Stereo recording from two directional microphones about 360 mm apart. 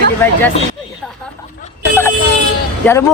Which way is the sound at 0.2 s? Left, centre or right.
Centre.